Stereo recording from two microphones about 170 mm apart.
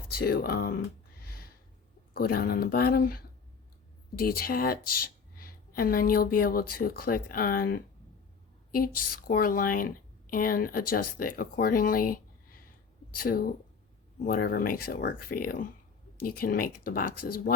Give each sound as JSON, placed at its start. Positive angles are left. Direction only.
{"t": 0.1, "sound": "speech", "side_deg": 65}
{"t": 2.1, "sound": "a woman's voice", "side_deg": 60}